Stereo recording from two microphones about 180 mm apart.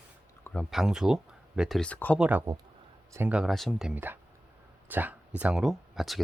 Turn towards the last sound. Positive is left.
turn(degrees=0)  # may be behind; listen again after turning